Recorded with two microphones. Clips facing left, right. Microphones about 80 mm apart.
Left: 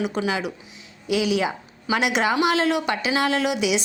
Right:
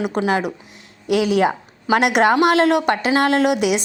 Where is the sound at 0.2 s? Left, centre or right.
Right.